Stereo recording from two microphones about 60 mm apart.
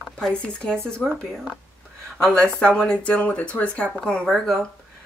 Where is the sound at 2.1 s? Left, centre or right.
Centre.